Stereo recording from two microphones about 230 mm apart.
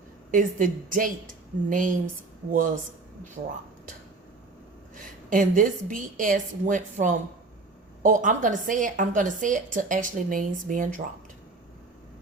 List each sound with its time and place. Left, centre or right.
0.3 s a woman's voice: right
4.9 s a woman's voice: right